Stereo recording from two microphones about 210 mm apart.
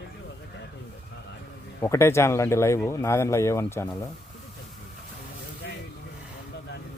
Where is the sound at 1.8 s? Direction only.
15° left (ahead or behind).